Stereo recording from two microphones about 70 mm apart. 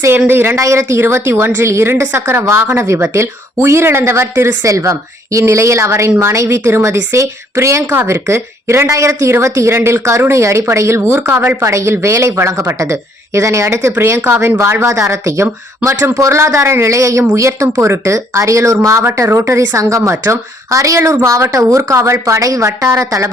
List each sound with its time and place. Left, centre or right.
0.3 s speech: right
0.6 s speech: right
4.6 s speech: right
11.0 s speech: right
14.6 s speech: right